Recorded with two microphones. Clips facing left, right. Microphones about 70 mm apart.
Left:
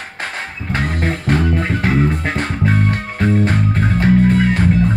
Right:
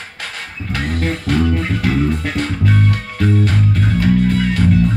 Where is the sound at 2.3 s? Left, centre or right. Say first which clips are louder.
Even; left.